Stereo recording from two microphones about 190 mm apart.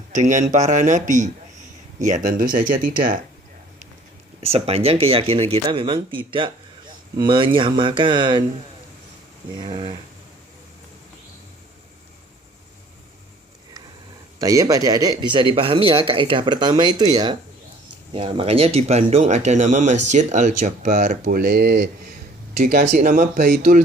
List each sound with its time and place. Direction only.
0.1 s speech: 40° right (ahead or behind)
4.4 s a man's voice: 30° right (ahead or behind)
9.6 s a man's voice: 30° right (ahead or behind)
14.3 s a man's voice: 15° right (ahead or behind); by 22.1 s 60° right (ahead or behind)
22.5 s speech: 45° right (ahead or behind)